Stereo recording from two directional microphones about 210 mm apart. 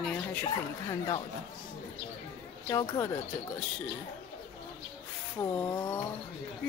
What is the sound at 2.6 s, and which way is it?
Speech, 15° left (ahead or behind).